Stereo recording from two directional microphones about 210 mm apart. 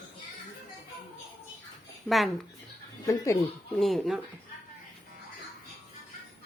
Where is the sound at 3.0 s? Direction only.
15° left (ahead or behind).